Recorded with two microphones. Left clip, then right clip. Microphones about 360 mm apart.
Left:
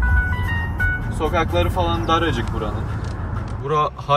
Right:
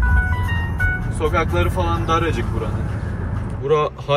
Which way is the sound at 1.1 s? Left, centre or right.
Left.